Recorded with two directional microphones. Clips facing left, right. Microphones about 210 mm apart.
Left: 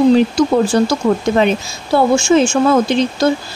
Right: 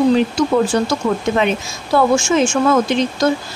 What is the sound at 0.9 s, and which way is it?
Speech, 35° left (ahead or behind).